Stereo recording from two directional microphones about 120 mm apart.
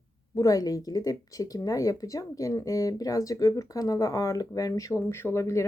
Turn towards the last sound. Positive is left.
turn(degrees=25)  # may be behind; listen again after turning